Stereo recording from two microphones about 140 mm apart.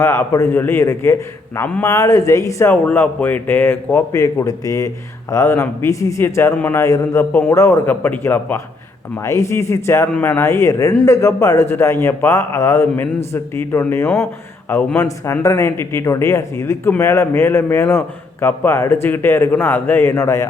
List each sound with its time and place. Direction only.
0.0 s speech: 20° left (ahead or behind)
2.8 s a man's voice: 10° left (ahead or behind)